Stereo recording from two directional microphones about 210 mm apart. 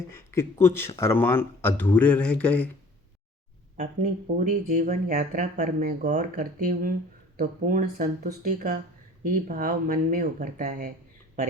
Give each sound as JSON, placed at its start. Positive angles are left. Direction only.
{"t": 0.1, "sound": "speech", "side_deg": 10}
{"t": 4.4, "sound": "speech", "side_deg": -35}